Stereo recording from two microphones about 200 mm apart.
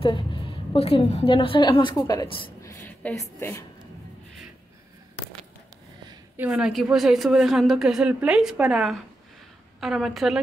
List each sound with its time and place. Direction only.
0.0 s a woman's voice: 25° left (ahead or behind)
6.3 s a woman's voice: 5° right (ahead or behind)